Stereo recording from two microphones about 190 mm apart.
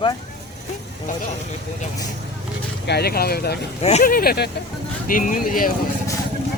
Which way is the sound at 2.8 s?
55° left (ahead or behind).